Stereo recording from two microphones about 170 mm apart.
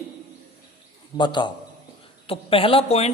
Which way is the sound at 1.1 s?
25° left (ahead or behind).